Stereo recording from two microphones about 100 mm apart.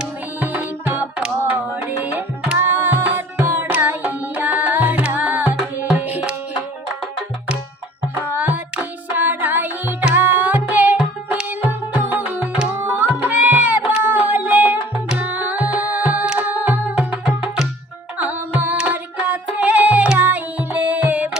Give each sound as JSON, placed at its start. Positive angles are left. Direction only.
{"t": 0.0, "sound": "music", "side_deg": -15}
{"t": 3.7, "sound": "tabla", "side_deg": -20}
{"t": 8.2, "sound": "music", "side_deg": -20}
{"t": 17.0, "sound": "music", "side_deg": -5}
{"t": 18.2, "sound": "music", "side_deg": -15}